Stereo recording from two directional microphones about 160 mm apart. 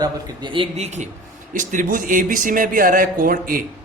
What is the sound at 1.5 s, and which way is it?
Speech, 55° right (ahead or behind).